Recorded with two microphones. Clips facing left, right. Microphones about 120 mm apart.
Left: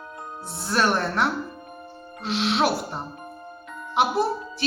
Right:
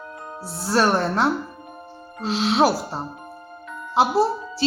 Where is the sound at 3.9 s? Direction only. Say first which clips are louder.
Right 3 dB; 30° right (ahead or behind).